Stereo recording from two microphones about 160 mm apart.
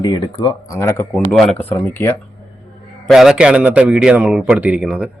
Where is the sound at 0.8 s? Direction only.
15° left (ahead or behind).